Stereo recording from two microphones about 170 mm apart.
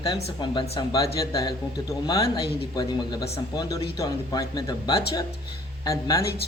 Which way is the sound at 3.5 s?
20° left (ahead or behind).